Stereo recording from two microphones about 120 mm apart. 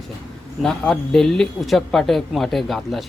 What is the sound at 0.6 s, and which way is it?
A man's voice, 5° left (ahead or behind).